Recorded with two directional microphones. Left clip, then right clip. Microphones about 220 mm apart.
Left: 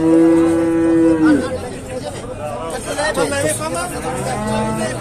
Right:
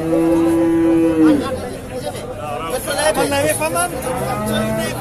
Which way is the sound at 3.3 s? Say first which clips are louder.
Right 2 dB; 35° right (ahead or behind).